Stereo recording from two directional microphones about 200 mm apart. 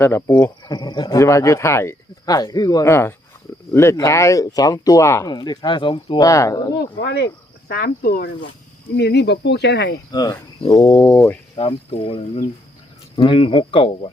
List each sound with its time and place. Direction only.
0.0 s speech: 10° left (ahead or behind)
7.0 s speech: 55° left (ahead or behind)
10.1 s speech: 20° left (ahead or behind)
11.5 s speech: 30° left (ahead or behind)